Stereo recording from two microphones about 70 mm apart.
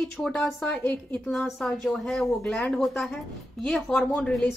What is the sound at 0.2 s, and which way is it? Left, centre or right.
Speech, centre.